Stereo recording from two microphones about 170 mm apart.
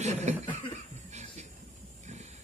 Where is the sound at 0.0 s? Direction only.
40° right (ahead or behind).